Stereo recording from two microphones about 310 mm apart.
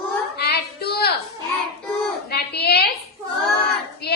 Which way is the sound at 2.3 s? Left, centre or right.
Left.